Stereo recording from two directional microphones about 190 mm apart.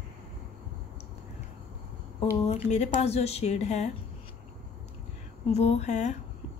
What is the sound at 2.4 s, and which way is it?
Speech, 35° left (ahead or behind).